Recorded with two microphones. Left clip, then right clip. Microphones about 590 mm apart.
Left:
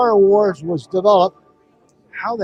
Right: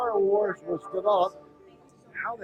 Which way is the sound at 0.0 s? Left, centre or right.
Left.